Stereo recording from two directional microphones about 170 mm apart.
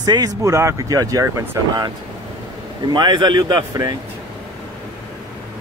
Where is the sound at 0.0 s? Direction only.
20° right (ahead or behind).